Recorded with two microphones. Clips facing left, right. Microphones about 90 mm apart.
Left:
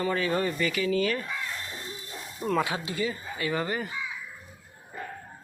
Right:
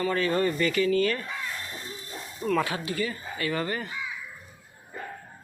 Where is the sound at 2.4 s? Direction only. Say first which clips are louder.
Right 1 dB; 15° left (ahead or behind).